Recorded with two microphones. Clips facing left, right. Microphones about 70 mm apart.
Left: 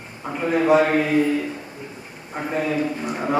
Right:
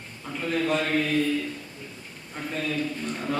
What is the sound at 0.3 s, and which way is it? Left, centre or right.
Speech, left.